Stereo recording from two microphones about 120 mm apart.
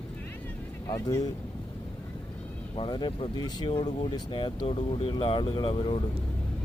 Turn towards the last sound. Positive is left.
turn(degrees=50)  # may be behind; listen again after turning